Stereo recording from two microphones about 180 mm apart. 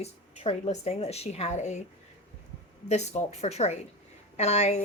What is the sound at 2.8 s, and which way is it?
Speech, 40° left (ahead or behind).